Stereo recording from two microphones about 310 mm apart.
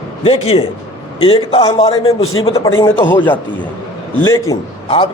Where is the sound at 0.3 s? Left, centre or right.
Centre.